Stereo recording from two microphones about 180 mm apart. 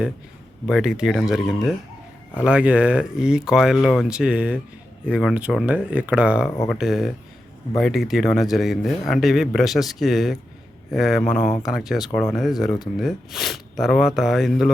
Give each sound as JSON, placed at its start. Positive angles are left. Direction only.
{"t": 0.7, "sound": "a man's voice", "side_deg": -5}